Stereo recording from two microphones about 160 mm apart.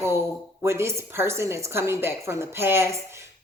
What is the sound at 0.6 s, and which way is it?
Speech, 15° right (ahead or behind).